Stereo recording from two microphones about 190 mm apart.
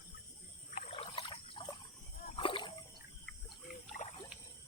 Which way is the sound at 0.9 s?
30° left (ahead or behind).